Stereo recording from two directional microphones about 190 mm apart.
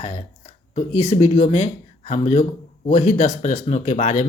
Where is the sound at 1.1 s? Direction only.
35° left (ahead or behind).